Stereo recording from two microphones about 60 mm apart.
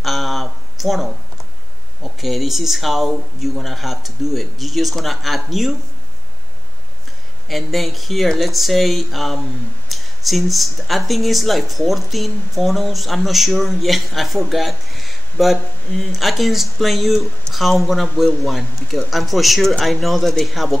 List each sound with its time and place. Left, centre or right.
0.0 s a sound: centre
2.1 s speech: centre
7.4 s speech: centre